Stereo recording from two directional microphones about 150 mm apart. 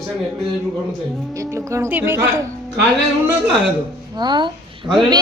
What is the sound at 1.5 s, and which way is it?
Speech, 20° right (ahead or behind).